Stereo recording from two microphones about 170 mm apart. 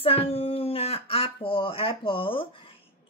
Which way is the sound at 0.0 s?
35° left (ahead or behind).